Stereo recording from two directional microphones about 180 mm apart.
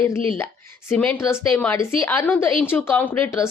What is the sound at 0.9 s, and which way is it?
A woman's voice, 10° left (ahead or behind).